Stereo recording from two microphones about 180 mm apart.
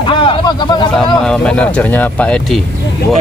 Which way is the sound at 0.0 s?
30° left (ahead or behind).